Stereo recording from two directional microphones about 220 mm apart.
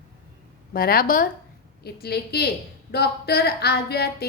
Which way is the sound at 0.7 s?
40° left (ahead or behind).